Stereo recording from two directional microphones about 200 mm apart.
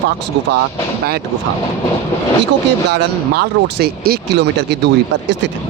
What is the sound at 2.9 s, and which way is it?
Speech, 55° right (ahead or behind).